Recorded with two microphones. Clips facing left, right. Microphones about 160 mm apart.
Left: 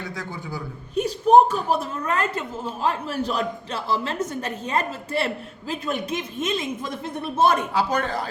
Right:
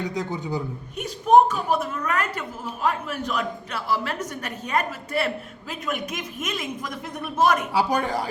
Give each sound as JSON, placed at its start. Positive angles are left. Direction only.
{"t": 0.0, "sound": "a man's voice", "side_deg": -20}
{"t": 0.9, "sound": "a woman's voice", "side_deg": 30}
{"t": 7.7, "sound": "a man's voice", "side_deg": -10}